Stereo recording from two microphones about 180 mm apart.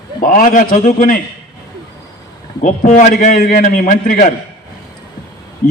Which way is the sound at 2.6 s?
45° left (ahead or behind).